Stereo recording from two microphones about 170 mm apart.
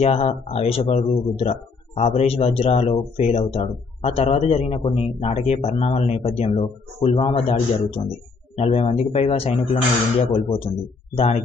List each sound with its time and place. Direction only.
0.0 s speech: 35° left (ahead or behind)